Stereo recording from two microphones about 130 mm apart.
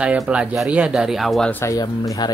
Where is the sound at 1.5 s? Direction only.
25° left (ahead or behind).